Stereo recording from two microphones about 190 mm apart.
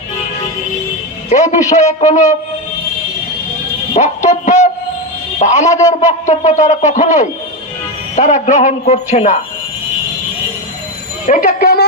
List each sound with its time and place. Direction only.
1.3 s speech: 40° left (ahead or behind)
3.9 s speech: 40° left (ahead or behind)
11.2 s speech: 45° left (ahead or behind)